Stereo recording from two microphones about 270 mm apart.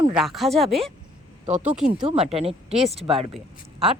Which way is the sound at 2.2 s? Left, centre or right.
Right.